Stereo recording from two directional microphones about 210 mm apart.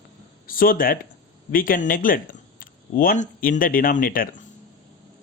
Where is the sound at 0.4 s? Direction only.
40° left (ahead or behind).